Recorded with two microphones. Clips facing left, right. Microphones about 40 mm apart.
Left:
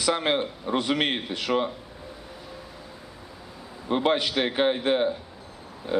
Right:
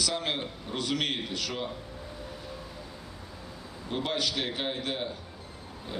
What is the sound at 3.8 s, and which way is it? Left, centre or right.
A man's voice, left.